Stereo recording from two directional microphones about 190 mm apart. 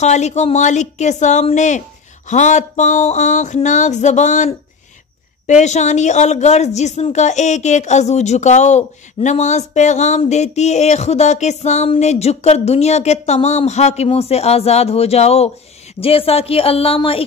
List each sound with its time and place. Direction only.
0.0 s a woman's voice: 35° left (ahead or behind)